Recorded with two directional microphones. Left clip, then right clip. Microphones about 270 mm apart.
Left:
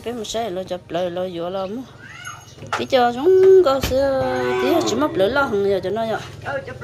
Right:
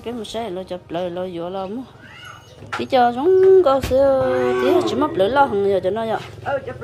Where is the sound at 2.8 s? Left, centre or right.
Centre.